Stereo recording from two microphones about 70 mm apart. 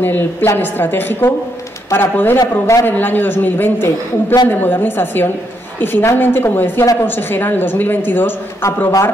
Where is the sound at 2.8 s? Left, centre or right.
Left.